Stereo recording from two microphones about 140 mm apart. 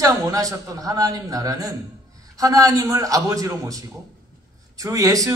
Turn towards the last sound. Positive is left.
turn(degrees=-25)  # may be behind; listen again after turning